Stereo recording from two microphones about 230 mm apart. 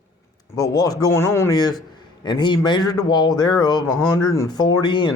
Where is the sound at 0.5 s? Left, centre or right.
Centre.